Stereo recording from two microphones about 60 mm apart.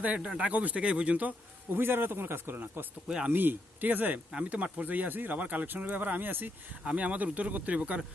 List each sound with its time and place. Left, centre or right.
0.0 s speech: right
1.7 s speech: right
3.1 s speech: centre
3.3 s speech: right